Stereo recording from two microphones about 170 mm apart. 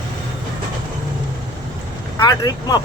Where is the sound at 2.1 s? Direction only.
20° left (ahead or behind).